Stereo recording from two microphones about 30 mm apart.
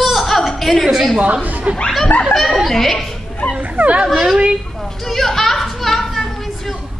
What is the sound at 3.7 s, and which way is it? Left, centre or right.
Dog, right.